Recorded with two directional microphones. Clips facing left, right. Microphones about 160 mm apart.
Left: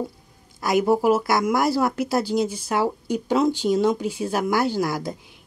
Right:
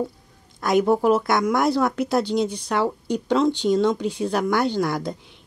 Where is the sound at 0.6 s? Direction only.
5° left (ahead or behind).